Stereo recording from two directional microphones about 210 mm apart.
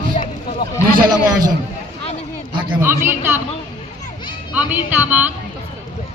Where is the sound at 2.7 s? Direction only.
10° right (ahead or behind).